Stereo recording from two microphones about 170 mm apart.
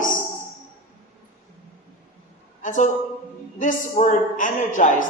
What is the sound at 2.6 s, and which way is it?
A woman's voice, 50° left (ahead or behind).